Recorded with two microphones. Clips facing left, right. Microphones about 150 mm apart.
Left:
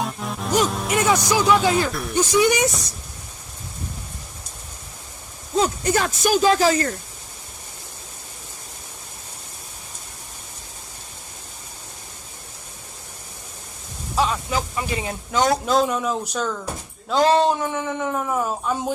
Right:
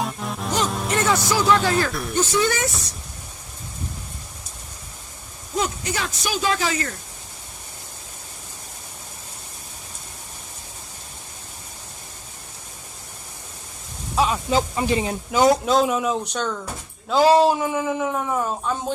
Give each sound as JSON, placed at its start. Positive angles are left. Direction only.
{"t": 0.0, "sound": "music", "side_deg": 0}
{"t": 0.7, "sound": "speech", "side_deg": 0}
{"t": 0.9, "sound": "speech", "side_deg": 15}
{"t": 1.9, "sound": "speech", "side_deg": 0}
{"t": 2.1, "sound": "speech", "side_deg": 15}
{"t": 5.8, "sound": "speech", "side_deg": 45}
{"t": 14.2, "sound": "a sound", "side_deg": 0}
{"t": 14.5, "sound": "speech", "side_deg": -30}
{"t": 15.3, "sound": "speech", "side_deg": -5}
{"t": 17.1, "sound": "speech", "side_deg": -5}